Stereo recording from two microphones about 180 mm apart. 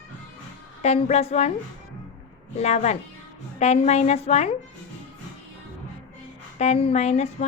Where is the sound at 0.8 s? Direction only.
35° left (ahead or behind).